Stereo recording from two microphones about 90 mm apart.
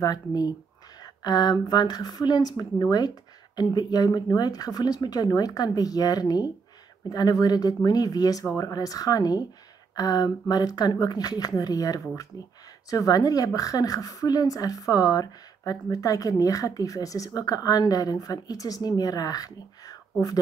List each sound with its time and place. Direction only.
0.0 s a woman's voice: 45° left (ahead or behind)